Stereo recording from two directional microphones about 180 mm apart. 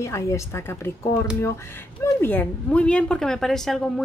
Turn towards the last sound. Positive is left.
turn(degrees=0)  # may be behind; listen again after turning